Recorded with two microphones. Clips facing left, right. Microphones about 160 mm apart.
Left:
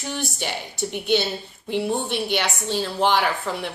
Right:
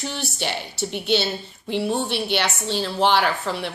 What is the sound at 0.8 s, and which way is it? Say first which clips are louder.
A woman's voice: left 1 dB; 15° left (ahead or behind).